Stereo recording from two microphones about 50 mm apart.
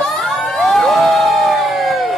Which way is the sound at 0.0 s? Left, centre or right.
Centre.